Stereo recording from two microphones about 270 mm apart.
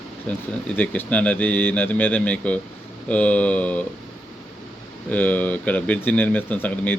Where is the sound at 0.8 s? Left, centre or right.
Centre.